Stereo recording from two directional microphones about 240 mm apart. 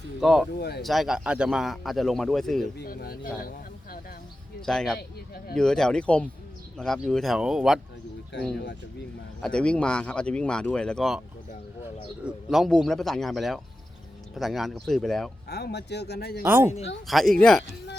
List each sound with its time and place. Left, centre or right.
0.2 s a man's voice: centre
2.7 s speech: left
4.6 s a man's voice: centre
4.9 s speech: left
5.5 s a man's voice: centre
9.4 s a man's voice: centre
12.2 s a man's voice: centre
15.4 s speech: left
16.4 s a man's voice: centre